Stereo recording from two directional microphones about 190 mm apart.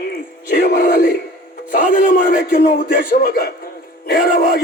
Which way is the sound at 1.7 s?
45° left (ahead or behind).